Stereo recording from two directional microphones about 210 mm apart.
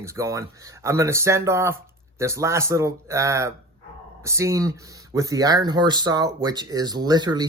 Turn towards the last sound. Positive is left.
turn(degrees=-20)  # may be behind; listen again after turning